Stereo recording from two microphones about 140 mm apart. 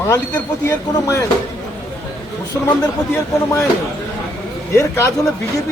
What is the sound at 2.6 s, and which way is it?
Speech, 25° left (ahead or behind).